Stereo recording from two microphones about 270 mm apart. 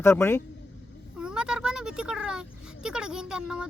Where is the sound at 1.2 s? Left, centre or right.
Centre.